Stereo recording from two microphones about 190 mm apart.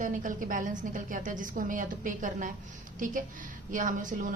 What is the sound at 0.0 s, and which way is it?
A woman's voice, 45° right (ahead or behind).